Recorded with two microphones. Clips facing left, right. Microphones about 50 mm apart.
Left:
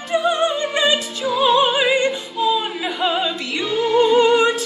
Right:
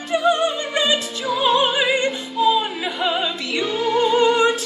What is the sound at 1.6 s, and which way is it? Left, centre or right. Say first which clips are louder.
Opera: left 2 dB; left.